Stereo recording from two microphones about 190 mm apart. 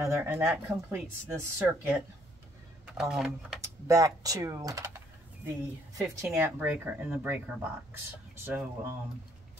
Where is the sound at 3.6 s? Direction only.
15° right (ahead or behind).